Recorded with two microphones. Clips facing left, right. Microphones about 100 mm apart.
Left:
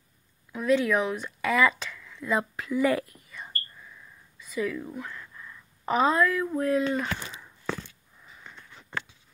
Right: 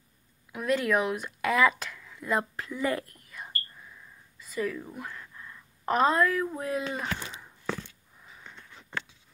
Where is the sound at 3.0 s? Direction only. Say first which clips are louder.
Left 3 dB; 55° right (ahead or behind).